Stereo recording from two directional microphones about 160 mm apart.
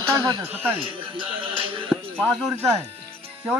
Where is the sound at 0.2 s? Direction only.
25° right (ahead or behind).